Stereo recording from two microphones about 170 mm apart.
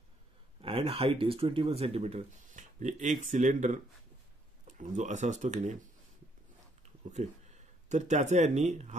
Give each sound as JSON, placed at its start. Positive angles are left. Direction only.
{"t": 0.6, "sound": "speech", "side_deg": -35}
{"t": 7.1, "sound": "speech", "side_deg": -45}